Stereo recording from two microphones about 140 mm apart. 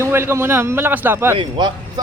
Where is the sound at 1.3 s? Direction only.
35° right (ahead or behind).